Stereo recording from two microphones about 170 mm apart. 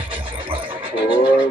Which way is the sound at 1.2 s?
5° right (ahead or behind).